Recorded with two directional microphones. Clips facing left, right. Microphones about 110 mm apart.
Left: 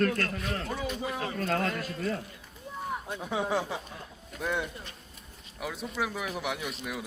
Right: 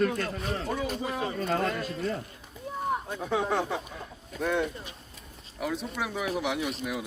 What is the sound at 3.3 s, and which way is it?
Speech, 55° right (ahead or behind).